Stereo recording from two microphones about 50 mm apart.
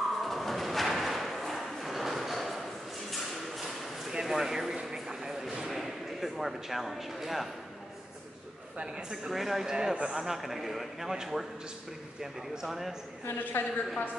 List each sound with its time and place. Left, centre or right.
0.2 s a sound: centre
8.9 s a man's voice: centre
13.4 s a woman's voice: left
13.7 s a woman's voice: left